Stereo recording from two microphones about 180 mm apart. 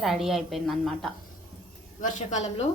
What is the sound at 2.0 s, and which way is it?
Speech, 40° left (ahead or behind).